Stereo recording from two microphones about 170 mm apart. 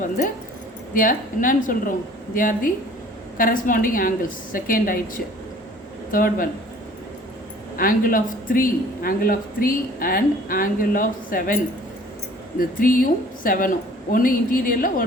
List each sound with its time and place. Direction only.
0.9 s a man's voice: 55° left (ahead or behind)
7.8 s a man's voice: 55° left (ahead or behind)